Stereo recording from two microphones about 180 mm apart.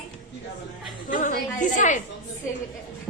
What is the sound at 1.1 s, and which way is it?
Speech, 45° left (ahead or behind).